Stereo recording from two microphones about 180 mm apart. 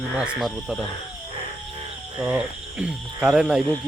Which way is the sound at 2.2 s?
5° right (ahead or behind).